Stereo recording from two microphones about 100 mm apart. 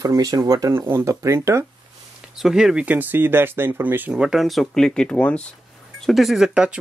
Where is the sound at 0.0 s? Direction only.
35° right (ahead or behind).